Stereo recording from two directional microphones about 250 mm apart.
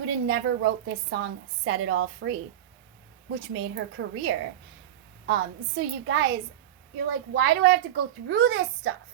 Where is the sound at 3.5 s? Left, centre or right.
Right.